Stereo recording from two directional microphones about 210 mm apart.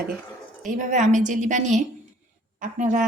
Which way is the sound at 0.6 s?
35° right (ahead or behind).